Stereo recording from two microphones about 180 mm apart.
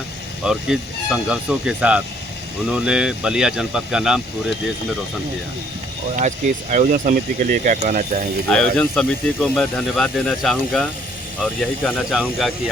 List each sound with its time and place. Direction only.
0.4 s speech: 5° right (ahead or behind)
6.1 s speech: 45° right (ahead or behind)
8.4 s speech: 5° left (ahead or behind)
12.1 s speech: centre (ahead or behind)